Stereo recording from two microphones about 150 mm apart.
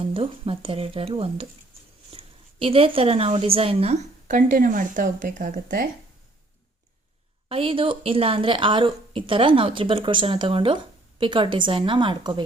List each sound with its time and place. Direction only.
0.0 s a woman's voice: 40° right (ahead or behind); by 5.8 s 65° right (ahead or behind)
7.4 s a woman's voice: 35° right (ahead or behind)